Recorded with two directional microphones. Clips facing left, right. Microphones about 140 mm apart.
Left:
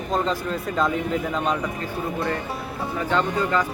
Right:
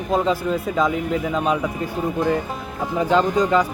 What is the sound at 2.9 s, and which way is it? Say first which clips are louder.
Speech: right 6 dB; 15° right (ahead or behind).